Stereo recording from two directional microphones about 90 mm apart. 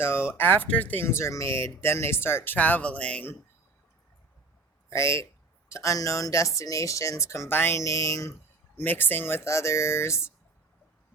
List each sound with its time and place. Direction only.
0.0 s speech: 25° left (ahead or behind)
4.9 s speech: 35° left (ahead or behind)
8.7 s speech: 20° left (ahead or behind)